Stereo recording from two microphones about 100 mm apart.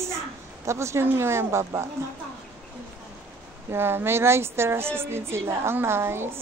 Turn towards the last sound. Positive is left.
turn(degrees=-25)  # may be behind; listen again after turning